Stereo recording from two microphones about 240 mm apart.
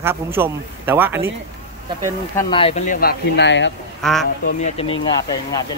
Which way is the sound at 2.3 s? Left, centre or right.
Centre.